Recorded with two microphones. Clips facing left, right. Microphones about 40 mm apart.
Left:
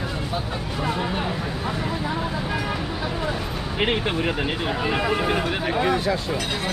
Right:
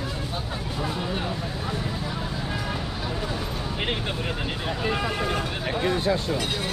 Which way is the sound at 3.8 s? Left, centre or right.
Left.